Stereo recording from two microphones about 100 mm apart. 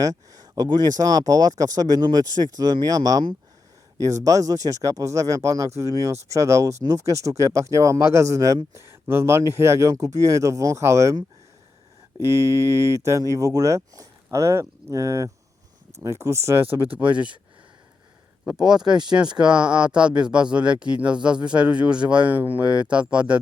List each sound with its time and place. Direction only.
0.0 s speech: 35° right (ahead or behind); by 17.2 s 15° right (ahead or behind)
18.4 s speech: 5° right (ahead or behind)